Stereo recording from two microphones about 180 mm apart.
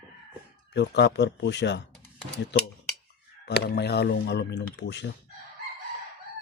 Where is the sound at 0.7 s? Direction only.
70° left (ahead or behind).